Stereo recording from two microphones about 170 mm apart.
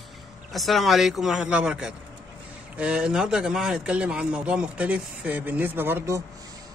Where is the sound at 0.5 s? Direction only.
Centre (ahead or behind).